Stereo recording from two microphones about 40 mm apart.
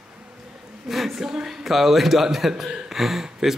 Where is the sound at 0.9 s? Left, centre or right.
Centre.